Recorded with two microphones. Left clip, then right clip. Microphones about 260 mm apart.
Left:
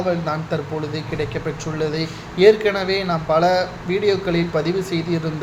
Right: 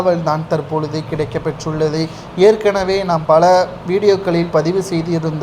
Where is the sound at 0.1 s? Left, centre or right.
Centre.